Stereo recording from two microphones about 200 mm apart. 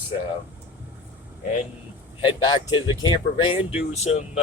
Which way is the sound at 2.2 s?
25° left (ahead or behind).